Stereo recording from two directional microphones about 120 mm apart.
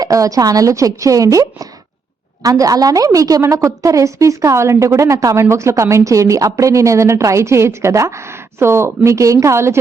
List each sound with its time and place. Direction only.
0.0 s a woman's voice: 30° right (ahead or behind)